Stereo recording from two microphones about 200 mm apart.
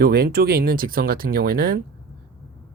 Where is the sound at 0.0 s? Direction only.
50° right (ahead or behind).